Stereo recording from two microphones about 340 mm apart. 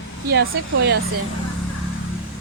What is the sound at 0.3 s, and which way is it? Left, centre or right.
Speech, right.